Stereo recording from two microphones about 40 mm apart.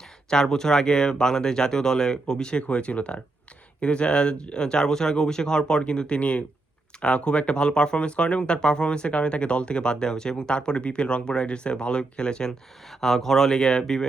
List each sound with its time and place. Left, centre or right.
0.3 s speech: centre
2.5 s speech: left
12.5 s speech: centre